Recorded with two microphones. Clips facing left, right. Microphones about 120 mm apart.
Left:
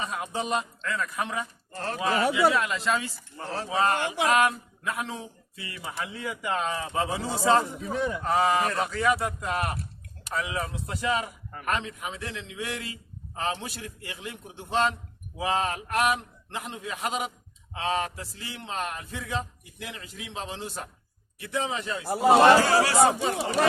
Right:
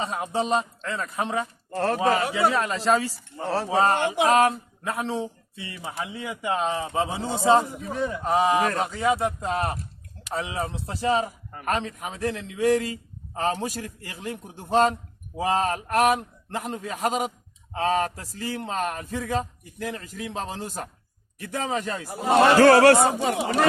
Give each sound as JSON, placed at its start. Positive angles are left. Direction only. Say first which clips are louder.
{"t": 0.0, "sound": "speech", "louder": "right 5 dB", "side_deg": -30}
{"t": 1.7, "sound": "speech", "louder": "right 9 dB", "side_deg": -65}
{"t": 2.0, "sound": "a man's voice", "louder": "left 1 dB", "side_deg": -40}
{"t": 3.4, "sound": "speech", "louder": "right 7 dB", "side_deg": -70}
{"t": 3.7, "sound": "a man's voice", "louder": "right 3 dB", "side_deg": -35}
{"t": 7.7, "sound": "a man's voice", "louder": "right 1 dB", "side_deg": -5}
{"t": 8.2, "sound": "a man's voice", "louder": "right 3 dB", "side_deg": -20}
{"t": 22.5, "sound": "speech", "louder": "right 7 dB", "side_deg": -60}